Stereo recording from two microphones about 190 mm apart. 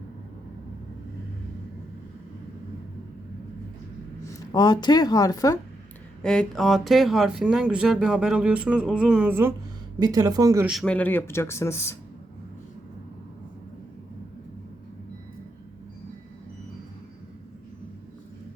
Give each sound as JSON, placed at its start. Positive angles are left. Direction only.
{"t": 4.2, "sound": "speech", "side_deg": 20}
{"t": 6.2, "sound": "speech", "side_deg": 5}
{"t": 10.7, "sound": "speech", "side_deg": 5}